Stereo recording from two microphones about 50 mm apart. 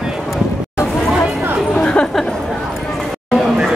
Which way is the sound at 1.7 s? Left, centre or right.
Left.